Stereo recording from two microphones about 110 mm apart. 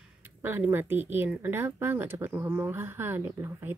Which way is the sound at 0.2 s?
20° right (ahead or behind).